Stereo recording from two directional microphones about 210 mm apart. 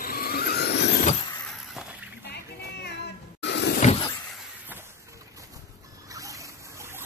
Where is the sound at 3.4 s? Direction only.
55° left (ahead or behind).